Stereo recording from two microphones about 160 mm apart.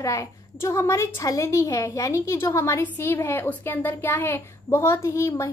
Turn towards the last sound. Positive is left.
turn(degrees=15)  # may be behind; listen again after turning